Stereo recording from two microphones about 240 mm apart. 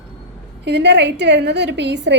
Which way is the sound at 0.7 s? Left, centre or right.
Right.